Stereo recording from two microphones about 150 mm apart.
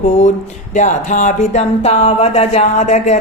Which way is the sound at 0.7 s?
55° left (ahead or behind).